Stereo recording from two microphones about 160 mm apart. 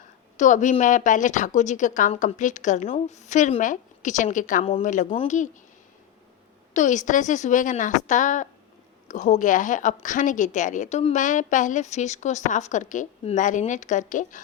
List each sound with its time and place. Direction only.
0.3 s a woman's voice: 50° left (ahead or behind)
6.7 s a woman's voice: 50° left (ahead or behind)